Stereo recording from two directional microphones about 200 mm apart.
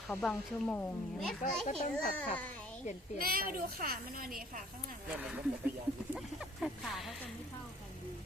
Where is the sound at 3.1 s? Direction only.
45° right (ahead or behind).